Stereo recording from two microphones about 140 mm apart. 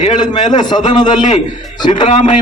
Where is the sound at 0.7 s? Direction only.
30° left (ahead or behind).